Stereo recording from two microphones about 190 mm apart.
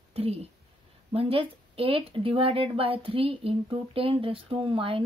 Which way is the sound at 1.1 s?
30° right (ahead or behind).